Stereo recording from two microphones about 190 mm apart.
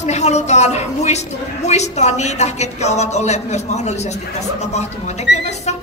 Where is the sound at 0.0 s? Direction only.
35° left (ahead or behind).